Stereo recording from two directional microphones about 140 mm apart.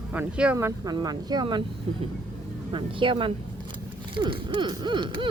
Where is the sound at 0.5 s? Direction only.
25° right (ahead or behind).